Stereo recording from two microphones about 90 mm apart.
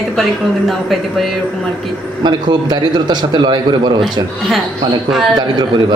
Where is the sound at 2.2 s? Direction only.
55° right (ahead or behind).